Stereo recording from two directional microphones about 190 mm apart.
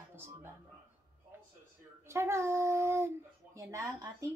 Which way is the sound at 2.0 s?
15° right (ahead or behind).